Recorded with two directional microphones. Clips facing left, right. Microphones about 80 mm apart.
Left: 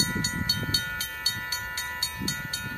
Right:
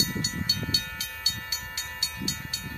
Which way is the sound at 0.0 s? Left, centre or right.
Left.